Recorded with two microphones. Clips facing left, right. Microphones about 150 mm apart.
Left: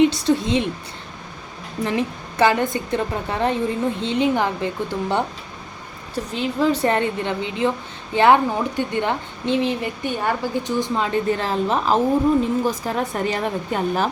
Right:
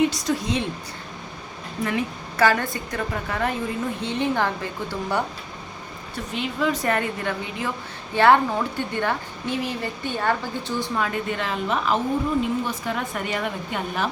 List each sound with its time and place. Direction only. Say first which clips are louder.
0.1 s a woman's voice: left 5 dB; 25° left (ahead or behind)
1.8 s a woman's voice: left 3 dB; 30° left (ahead or behind)
6.3 s a woman's voice: left 4 dB; 30° left (ahead or behind)